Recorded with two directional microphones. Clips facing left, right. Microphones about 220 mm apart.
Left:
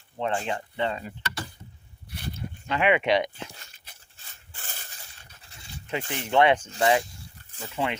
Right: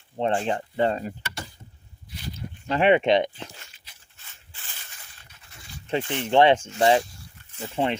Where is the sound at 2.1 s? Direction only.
60° left (ahead or behind).